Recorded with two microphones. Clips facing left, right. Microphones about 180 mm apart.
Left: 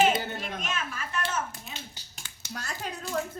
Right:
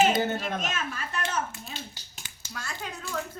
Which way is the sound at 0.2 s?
40° right (ahead or behind).